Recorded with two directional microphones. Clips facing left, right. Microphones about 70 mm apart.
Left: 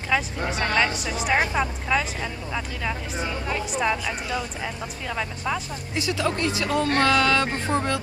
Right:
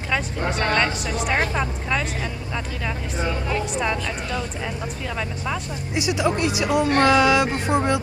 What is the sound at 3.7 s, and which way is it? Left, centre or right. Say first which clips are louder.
Speech: even; centre.